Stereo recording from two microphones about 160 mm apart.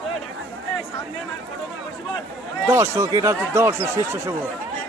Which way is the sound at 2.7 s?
15° right (ahead or behind).